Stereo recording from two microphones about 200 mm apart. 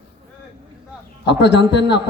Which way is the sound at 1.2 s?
60° left (ahead or behind).